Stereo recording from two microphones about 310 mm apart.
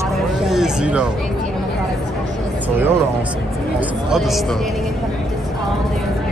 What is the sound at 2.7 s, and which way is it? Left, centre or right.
Speech, centre.